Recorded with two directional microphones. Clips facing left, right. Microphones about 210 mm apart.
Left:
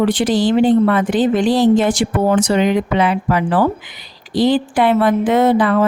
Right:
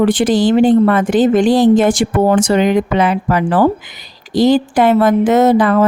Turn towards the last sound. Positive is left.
turn(degrees=-45)  # may be behind; listen again after turning